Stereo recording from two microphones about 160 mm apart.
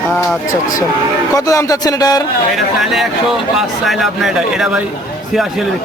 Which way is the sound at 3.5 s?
Centre (ahead or behind).